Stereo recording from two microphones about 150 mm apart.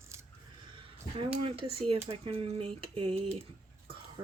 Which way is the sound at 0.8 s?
35° right (ahead or behind).